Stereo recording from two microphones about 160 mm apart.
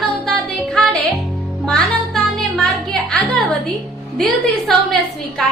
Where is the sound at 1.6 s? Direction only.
5° left (ahead or behind).